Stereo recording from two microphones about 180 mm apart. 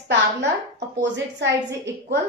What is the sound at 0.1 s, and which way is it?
A woman's voice, 75° right (ahead or behind).